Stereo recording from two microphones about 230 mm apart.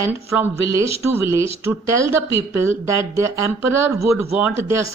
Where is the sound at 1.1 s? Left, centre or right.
Centre.